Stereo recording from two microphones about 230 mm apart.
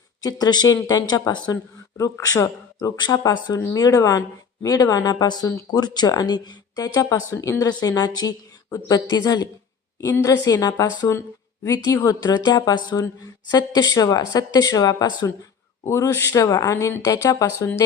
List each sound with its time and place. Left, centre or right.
0.2 s speech: centre